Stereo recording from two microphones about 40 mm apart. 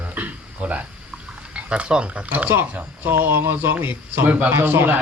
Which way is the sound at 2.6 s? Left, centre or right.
Right.